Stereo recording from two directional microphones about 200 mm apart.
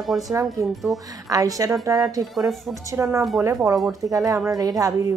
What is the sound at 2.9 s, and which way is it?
A woman's voice, 15° right (ahead or behind).